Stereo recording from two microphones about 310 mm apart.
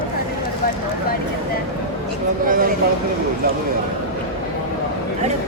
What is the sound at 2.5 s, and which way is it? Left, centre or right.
Speech, right.